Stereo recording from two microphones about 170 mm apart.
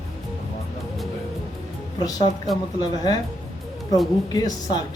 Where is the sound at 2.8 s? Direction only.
25° left (ahead or behind).